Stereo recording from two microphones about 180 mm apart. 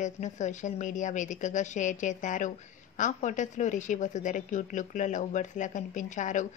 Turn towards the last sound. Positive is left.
turn(degrees=45)  # may be behind; listen again after turning